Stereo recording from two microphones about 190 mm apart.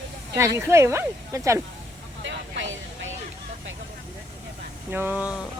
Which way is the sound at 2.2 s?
80° right.